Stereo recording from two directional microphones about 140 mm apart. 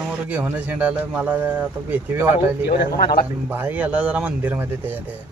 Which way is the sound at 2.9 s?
90° left.